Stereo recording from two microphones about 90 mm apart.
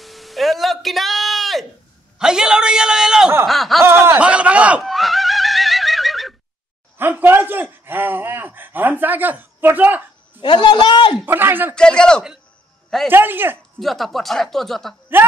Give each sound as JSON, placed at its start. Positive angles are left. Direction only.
{"t": 0.0, "sound": "a sound", "side_deg": 0}
{"t": 2.1, "sound": "a man's voice", "side_deg": -5}
{"t": 3.8, "sound": "speech", "side_deg": -25}
{"t": 4.2, "sound": "a sound", "side_deg": -15}
{"t": 4.8, "sound": "neigh", "side_deg": 0}
{"t": 7.0, "sound": "speech", "side_deg": -25}
{"t": 10.4, "sound": "a man's voice", "side_deg": 55}
{"t": 11.2, "sound": "speech", "side_deg": -25}
{"t": 11.7, "sound": "a man's voice", "side_deg": 10}
{"t": 13.1, "sound": "speech", "side_deg": -25}
{"t": 13.7, "sound": "speech", "side_deg": 0}